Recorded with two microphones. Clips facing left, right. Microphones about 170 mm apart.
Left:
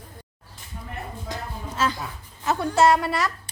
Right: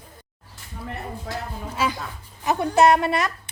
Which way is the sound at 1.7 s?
10° right (ahead or behind).